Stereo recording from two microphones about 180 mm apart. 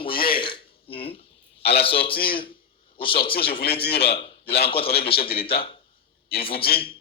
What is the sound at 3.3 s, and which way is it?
Speech, 60° left (ahead or behind).